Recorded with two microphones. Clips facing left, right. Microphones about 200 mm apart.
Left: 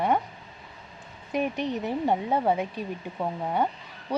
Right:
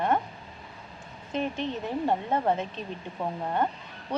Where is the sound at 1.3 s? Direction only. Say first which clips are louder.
Left 3 dB; 15° left (ahead or behind).